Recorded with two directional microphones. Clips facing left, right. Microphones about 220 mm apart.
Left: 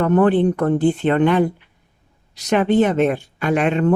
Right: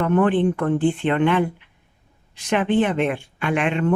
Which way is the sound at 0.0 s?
40° left (ahead or behind).